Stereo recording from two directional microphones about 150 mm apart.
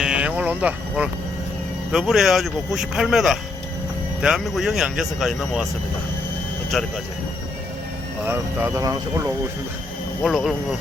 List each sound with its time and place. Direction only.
0.0 s a sound: 5° right (ahead or behind)
1.9 s speech: centre (ahead or behind)
6.7 s speech: centre (ahead or behind)
8.2 s speech: 15° right (ahead or behind)
10.2 s speech: centre (ahead or behind)